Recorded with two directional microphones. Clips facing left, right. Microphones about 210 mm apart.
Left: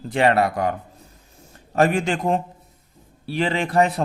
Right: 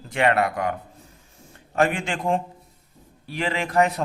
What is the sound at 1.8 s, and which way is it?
A man's voice, 40° left (ahead or behind).